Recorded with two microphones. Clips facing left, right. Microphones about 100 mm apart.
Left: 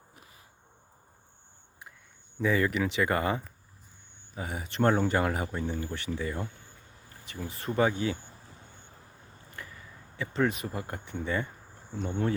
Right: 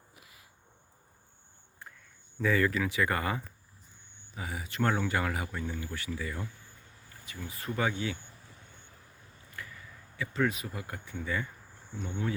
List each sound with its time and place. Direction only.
0.2 s a sound: 35° left (ahead or behind)
2.4 s speech: 20° left (ahead or behind)
4.4 s speech: 35° left (ahead or behind)
9.5 s a sound: 30° left (ahead or behind)
10.8 s speech: 40° left (ahead or behind)
11.0 s speech: 25° left (ahead or behind); by 12.3 s 40° left (ahead or behind)